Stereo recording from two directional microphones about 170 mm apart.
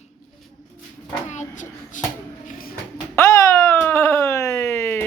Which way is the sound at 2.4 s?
60° left (ahead or behind).